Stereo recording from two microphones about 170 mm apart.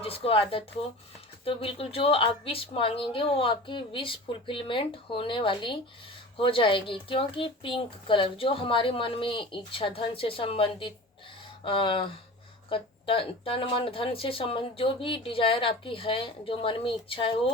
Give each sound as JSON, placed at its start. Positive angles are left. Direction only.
{"t": 0.0, "sound": "speech", "side_deg": 35}